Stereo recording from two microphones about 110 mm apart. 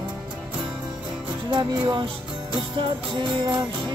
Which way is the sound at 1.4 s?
45° right (ahead or behind).